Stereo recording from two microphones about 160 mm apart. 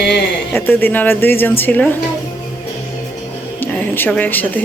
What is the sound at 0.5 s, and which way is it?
A woman's voice, 10° left (ahead or behind).